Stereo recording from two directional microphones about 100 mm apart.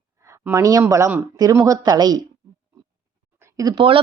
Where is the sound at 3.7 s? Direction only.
65° right (ahead or behind).